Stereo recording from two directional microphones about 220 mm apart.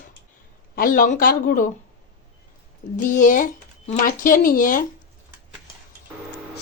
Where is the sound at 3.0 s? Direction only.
35° left (ahead or behind).